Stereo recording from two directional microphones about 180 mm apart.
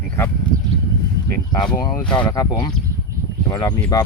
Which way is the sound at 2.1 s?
25° left (ahead or behind).